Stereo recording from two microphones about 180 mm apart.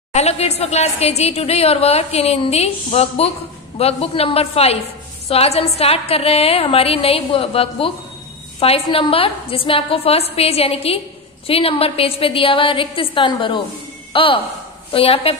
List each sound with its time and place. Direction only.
0.1 s a woman's voice: 35° left (ahead or behind)